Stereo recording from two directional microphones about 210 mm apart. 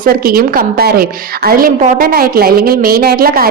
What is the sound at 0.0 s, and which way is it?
A woman's voice, 45° right (ahead or behind).